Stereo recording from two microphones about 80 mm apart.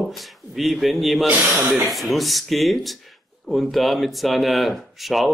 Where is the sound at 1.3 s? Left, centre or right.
Centre.